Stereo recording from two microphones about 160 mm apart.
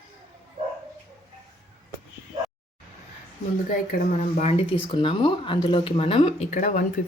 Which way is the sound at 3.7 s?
55° left (ahead or behind).